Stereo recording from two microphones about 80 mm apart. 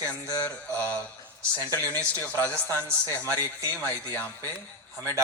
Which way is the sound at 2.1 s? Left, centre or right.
Right.